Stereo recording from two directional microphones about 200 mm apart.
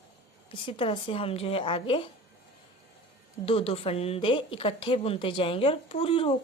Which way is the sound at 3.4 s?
30° left (ahead or behind).